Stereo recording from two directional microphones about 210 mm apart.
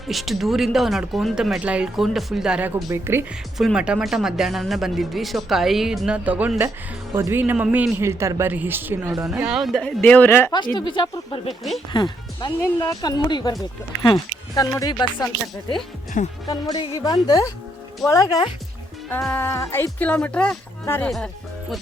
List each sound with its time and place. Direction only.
0.1 s speech: centre (ahead or behind)
10.5 s speech: 20° left (ahead or behind)
16.1 s music: 35° left (ahead or behind)
16.5 s speech: 20° left (ahead or behind); by 21.2 s 5° left (ahead or behind)